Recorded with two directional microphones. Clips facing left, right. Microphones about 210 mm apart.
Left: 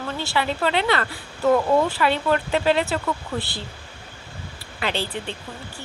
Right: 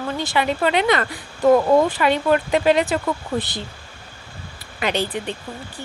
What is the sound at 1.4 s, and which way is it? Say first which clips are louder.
Speech: right 4 dB; 35° right (ahead or behind).